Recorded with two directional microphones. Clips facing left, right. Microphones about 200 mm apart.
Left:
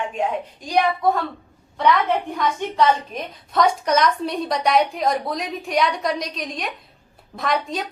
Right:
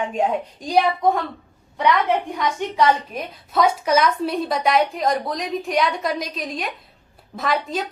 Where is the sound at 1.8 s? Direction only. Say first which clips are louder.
Even; 10° right (ahead or behind).